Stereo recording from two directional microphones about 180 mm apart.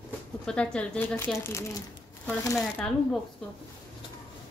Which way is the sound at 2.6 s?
5° left (ahead or behind).